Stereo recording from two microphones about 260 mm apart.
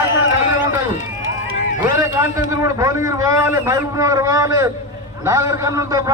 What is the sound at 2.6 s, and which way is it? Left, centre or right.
A man's voice, centre.